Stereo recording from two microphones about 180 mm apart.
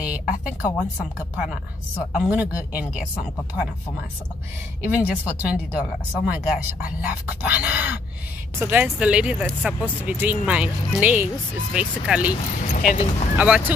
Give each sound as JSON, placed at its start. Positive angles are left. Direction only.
{"t": 0.0, "sound": "a sound", "side_deg": -5}
{"t": 1.3, "sound": "a woman's voice", "side_deg": -5}
{"t": 4.8, "sound": "speech", "side_deg": -10}
{"t": 12.5, "sound": "speech", "side_deg": 40}
{"t": 13.4, "sound": "speech", "side_deg": -10}